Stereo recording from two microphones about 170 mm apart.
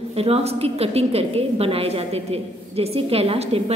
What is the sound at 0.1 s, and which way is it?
A woman's voice, 35° right (ahead or behind).